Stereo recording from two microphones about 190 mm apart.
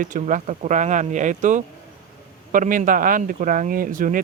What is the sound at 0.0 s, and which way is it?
Speech, 40° right (ahead or behind).